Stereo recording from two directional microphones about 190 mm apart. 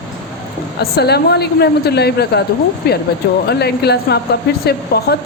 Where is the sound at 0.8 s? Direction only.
60° left (ahead or behind).